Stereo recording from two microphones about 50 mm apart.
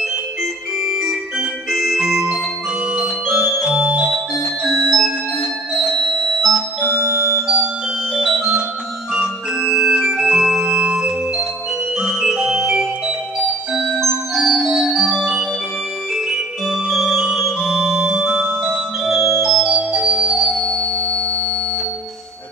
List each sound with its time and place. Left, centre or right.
0.0 s organ: centre
1.7 s music: centre
6.0 s music: centre
7.4 s music: centre
8.1 s organ: centre
9.8 s organ: centre
12.0 s music: centre
14.3 s organ: centre
16.3 s organ: centre
18.6 s music: centre
20.6 s music: centre